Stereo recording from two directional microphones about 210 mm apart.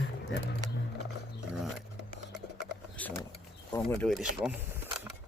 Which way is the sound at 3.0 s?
5° left (ahead or behind).